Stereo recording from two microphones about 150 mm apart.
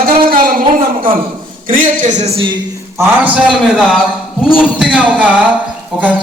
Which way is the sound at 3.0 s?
10° right (ahead or behind).